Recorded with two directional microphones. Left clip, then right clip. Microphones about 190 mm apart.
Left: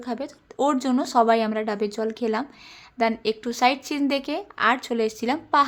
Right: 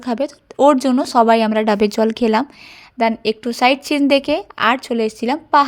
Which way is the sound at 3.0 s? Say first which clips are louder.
Right 6 dB; 30° right (ahead or behind).